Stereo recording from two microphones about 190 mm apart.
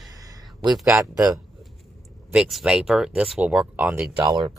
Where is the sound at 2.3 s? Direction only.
5° right (ahead or behind).